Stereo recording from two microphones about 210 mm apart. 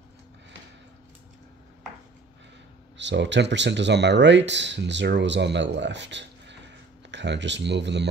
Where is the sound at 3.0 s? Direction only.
60° right (ahead or behind).